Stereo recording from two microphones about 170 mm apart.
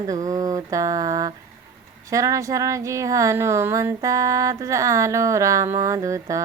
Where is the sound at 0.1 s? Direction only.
20° right (ahead or behind).